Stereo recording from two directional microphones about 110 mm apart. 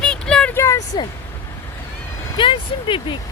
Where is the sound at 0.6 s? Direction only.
30° left (ahead or behind).